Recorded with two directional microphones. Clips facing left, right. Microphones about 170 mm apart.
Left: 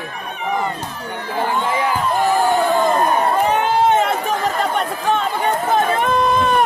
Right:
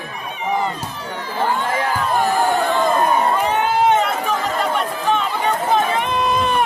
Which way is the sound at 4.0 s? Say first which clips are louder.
Left 2 dB; 45° left (ahead or behind).